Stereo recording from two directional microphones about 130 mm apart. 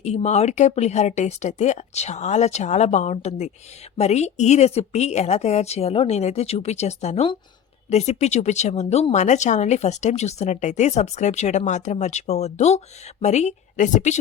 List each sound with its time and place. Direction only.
0.0 s speech: 55° left (ahead or behind)